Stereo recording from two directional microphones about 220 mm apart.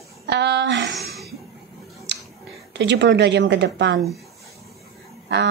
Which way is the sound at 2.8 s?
50° right (ahead or behind).